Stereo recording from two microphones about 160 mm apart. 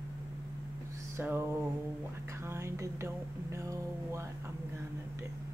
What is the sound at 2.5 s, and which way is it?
Speech, 15° right (ahead or behind).